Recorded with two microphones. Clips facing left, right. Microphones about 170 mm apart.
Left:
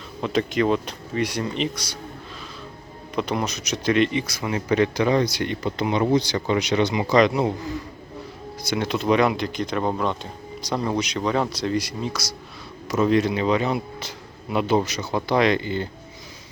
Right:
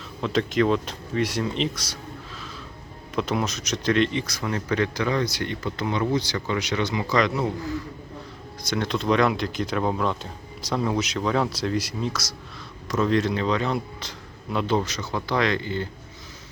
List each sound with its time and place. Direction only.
0.2 s speech: centre (ahead or behind)
3.2 s speech: centre (ahead or behind)
4.5 s speech: 15° left (ahead or behind)
8.6 s speech: 5° left (ahead or behind)